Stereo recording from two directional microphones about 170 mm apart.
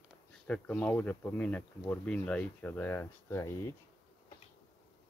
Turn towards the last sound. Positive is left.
turn(degrees=15)  # may be behind; listen again after turning